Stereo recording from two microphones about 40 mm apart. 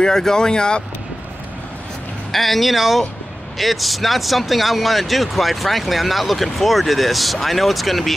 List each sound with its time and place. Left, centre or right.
0.0 s speech: centre
2.3 s speech: centre